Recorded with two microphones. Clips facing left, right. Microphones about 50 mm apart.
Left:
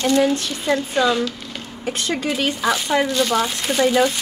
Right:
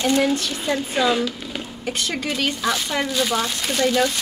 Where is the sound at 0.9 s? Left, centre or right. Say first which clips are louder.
Even; centre.